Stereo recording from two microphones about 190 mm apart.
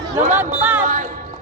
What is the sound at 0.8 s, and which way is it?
Speech, 40° right (ahead or behind).